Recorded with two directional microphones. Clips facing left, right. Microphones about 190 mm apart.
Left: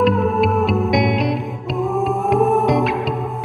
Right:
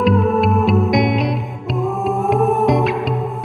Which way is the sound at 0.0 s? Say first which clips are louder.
Right 1 dB; centre (ahead or behind).